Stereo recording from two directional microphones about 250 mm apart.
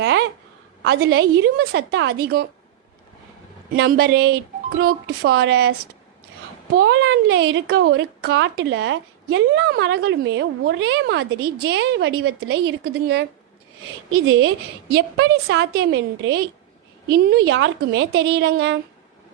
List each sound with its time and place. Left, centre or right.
0.0 s a sound: right
0.8 s speech: right
3.8 s speech: right
6.7 s speech: right
14.3 s speech: right